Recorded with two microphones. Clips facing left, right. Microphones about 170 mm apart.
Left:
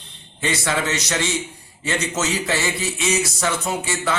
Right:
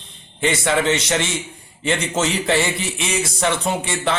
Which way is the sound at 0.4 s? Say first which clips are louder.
Right 5 dB; 25° right (ahead or behind).